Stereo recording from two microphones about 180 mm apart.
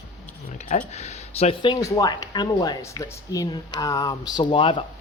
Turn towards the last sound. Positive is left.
turn(degrees=30)  # may be behind; listen again after turning